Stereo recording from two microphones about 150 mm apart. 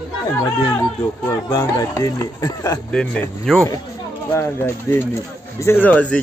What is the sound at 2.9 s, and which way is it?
Speech, 5° left (ahead or behind).